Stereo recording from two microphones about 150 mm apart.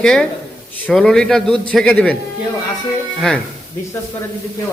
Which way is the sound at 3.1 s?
5° left (ahead or behind).